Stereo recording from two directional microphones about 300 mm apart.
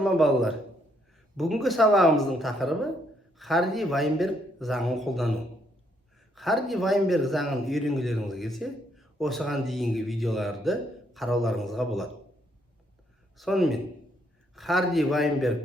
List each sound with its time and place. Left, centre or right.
0.0 s a man's voice: centre
6.3 s a man's voice: centre
13.3 s a man's voice: centre